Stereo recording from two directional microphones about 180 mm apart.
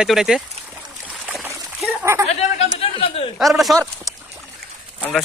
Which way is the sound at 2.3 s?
35° left (ahead or behind).